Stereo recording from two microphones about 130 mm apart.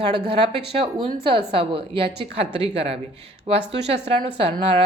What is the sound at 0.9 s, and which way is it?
A woman's voice, 45° right (ahead or behind).